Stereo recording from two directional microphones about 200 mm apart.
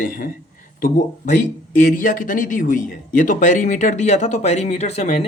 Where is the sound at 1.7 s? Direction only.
40° left (ahead or behind).